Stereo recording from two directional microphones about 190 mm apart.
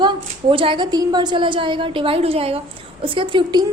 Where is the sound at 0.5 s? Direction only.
25° right (ahead or behind).